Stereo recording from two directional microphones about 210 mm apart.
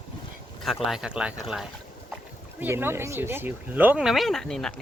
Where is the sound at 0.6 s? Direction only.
Centre (ahead or behind).